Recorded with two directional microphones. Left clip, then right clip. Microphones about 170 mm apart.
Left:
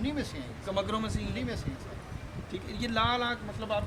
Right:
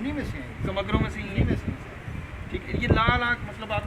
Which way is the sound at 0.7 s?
50° left (ahead or behind).